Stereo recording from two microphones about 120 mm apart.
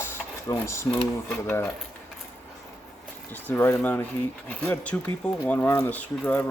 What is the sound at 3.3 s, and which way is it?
Speech, 15° left (ahead or behind).